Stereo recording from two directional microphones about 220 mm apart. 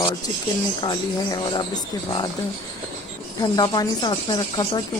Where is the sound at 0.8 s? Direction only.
20° left (ahead or behind).